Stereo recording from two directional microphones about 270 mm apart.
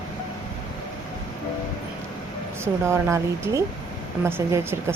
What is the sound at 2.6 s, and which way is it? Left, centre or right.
Speech, centre.